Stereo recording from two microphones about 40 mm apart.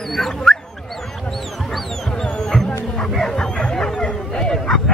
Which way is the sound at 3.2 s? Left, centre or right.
Left.